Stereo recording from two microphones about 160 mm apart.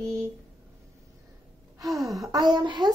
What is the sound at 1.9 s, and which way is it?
Speech, centre (ahead or behind).